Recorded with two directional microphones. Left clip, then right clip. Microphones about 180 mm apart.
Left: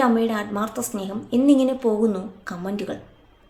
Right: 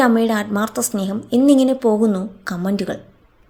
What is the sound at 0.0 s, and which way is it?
Speech, 35° right (ahead or behind).